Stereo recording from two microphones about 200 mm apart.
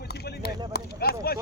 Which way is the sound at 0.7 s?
50° left (ahead or behind).